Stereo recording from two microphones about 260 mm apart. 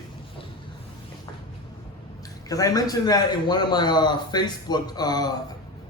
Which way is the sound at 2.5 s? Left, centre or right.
Centre.